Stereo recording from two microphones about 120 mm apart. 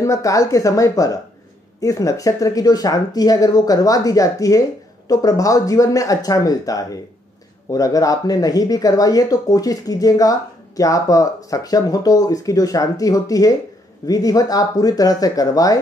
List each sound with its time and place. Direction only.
0.0 s speech: 25° left (ahead or behind)